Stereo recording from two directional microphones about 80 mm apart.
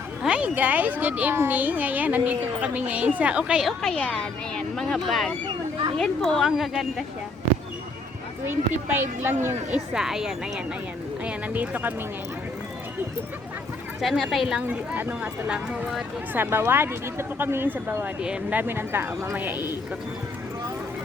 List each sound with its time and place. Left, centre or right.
0.2 s a woman's voice: centre
3.8 s speech: centre
8.4 s a woman's voice: right
9.9 s speech: centre; by 11.9 s right
14.0 s speech: centre
14.9 s a woman's voice: right
15.4 s speech: centre
16.3 s a woman's voice: right
18.0 s speech: centre
18.5 s a woman's voice: right